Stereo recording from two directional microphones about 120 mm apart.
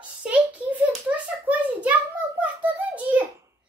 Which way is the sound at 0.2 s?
10° right (ahead or behind).